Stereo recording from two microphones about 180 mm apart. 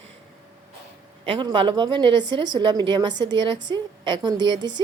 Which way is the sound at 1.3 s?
30° right (ahead or behind).